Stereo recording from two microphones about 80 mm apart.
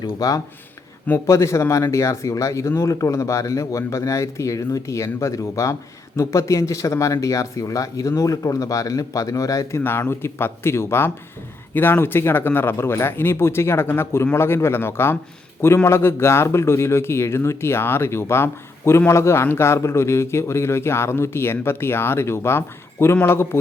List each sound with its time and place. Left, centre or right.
0.2 s speech: left
1.3 s a man's voice: left
9.8 s a man's voice: left